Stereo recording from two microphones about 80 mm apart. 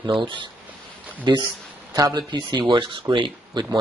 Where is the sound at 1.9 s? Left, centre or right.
Right.